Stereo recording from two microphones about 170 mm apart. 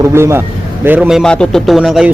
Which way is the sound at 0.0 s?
15° right (ahead or behind).